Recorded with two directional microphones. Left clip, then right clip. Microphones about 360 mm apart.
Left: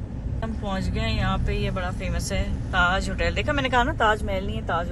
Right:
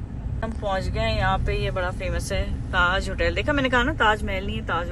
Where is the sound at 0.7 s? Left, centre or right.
Centre.